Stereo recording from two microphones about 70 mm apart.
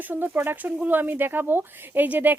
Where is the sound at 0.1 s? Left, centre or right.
Right.